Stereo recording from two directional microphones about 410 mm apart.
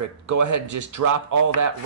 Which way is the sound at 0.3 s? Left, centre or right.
Right.